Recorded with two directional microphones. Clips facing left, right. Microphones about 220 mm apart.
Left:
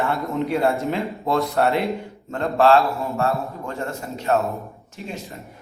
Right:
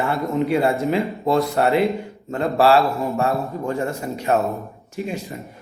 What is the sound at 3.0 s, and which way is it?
A man's voice, 15° right (ahead or behind).